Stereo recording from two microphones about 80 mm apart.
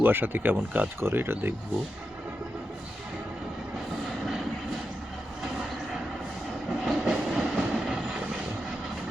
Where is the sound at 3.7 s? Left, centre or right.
Centre.